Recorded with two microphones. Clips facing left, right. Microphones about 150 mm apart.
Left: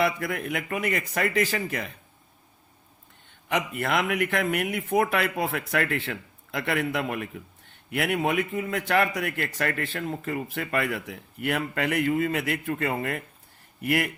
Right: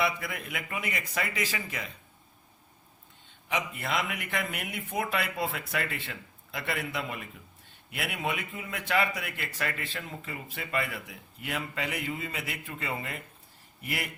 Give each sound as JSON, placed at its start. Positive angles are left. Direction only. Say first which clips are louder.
{"t": 0.0, "sound": "speech", "louder": "left 5 dB", "side_deg": 50}
{"t": 3.5, "sound": "speech", "louder": "left 5 dB", "side_deg": 55}